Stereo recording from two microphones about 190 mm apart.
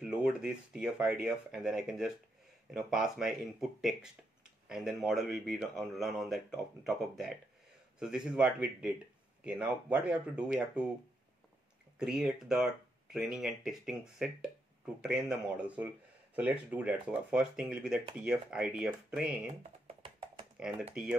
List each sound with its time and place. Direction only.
0.0 s speech: 5° right (ahead or behind)
12.0 s speech: 5° right (ahead or behind)
19.6 s computer keyboard: 35° right (ahead or behind)
20.6 s speech: 5° right (ahead or behind)